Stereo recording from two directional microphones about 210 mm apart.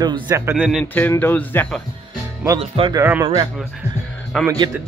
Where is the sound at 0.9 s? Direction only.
10° left (ahead or behind).